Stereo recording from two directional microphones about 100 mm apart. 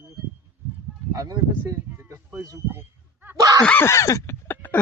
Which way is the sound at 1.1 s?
35° right (ahead or behind).